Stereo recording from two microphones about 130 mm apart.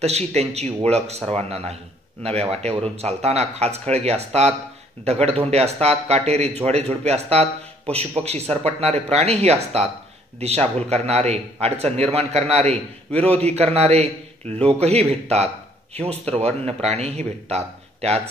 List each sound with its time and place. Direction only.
0.0 s a man's voice: 55° right (ahead or behind)